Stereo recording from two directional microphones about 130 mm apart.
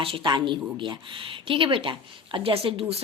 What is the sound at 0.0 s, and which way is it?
Speech, 40° right (ahead or behind).